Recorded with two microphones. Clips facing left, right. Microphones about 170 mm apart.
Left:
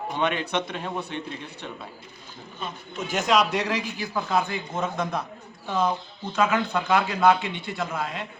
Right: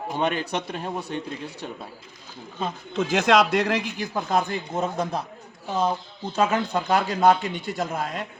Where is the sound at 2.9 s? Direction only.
90° right.